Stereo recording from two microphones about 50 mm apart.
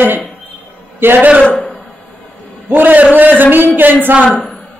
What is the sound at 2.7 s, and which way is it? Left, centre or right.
A woman's voice, right.